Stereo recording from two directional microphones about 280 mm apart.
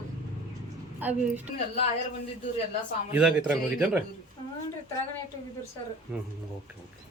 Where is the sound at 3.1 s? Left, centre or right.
Centre.